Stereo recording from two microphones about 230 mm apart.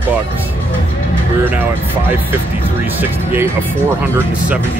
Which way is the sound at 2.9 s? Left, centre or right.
Centre.